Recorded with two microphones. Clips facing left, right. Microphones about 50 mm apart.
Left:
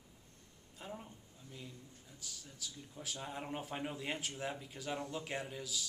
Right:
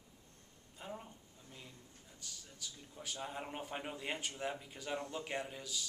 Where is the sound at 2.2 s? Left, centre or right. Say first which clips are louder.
Left 1 dB; centre.